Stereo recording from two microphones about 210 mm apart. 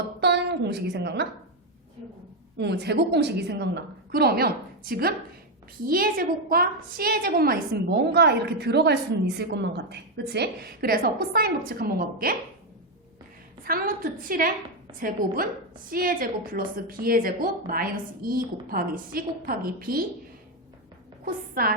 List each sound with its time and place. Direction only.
0.2 s a woman's voice: 50° right (ahead or behind)
2.6 s a woman's voice: 55° right (ahead or behind)
13.7 s a woman's voice: 40° right (ahead or behind)
21.2 s a woman's voice: 45° right (ahead or behind)